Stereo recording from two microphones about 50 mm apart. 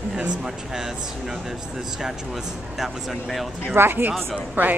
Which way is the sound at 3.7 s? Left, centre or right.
Right.